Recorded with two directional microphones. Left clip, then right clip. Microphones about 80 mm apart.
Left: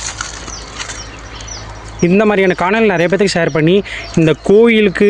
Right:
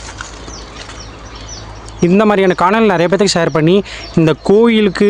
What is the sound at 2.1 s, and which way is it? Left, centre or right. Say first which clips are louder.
Speech: even; right.